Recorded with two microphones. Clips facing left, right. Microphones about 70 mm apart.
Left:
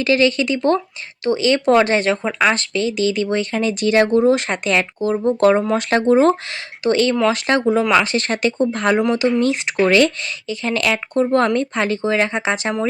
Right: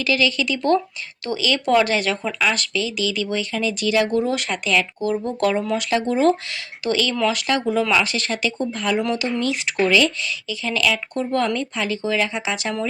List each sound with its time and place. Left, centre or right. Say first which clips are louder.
0.0 s speech: left 5 dB; left
9.0 s speech: left 6 dB; left
9.9 s speech: left 4 dB; left
11.1 s speech: left 6 dB; left